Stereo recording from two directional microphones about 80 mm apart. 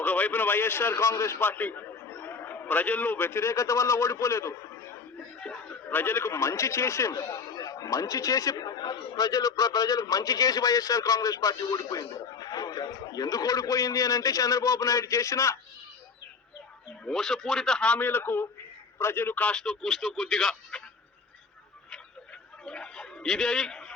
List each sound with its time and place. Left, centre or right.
0.0 s a man's voice: left
1.4 s a man's voice: left
5.4 s speech: centre; by 15.5 s left
17.1 s a man's voice: centre; by 19.5 s left
19.5 s speech: centre
22.6 s a man's voice: centre